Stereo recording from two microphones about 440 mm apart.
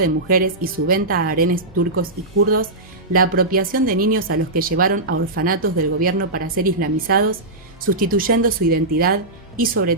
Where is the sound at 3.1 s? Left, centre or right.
Centre.